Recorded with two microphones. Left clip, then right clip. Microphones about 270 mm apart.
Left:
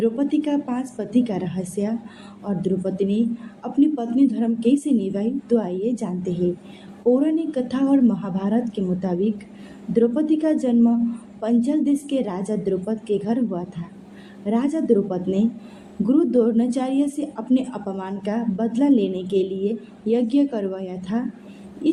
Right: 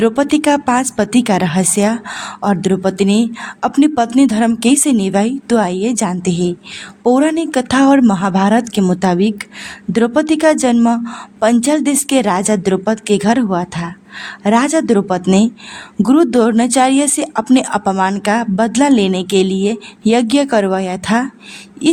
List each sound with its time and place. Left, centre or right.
0.0 s a woman's voice: right